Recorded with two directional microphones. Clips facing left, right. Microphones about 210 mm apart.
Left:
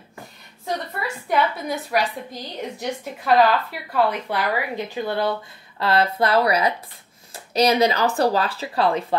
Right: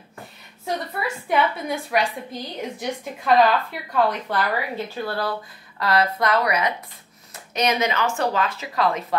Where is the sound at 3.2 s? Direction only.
5° left (ahead or behind).